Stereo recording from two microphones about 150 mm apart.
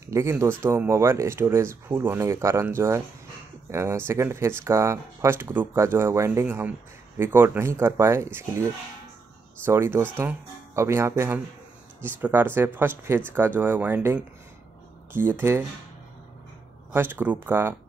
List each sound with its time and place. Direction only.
0.1 s speech: 20° right (ahead or behind)
9.7 s speech: 15° right (ahead or behind)
16.9 s speech: 15° right (ahead or behind)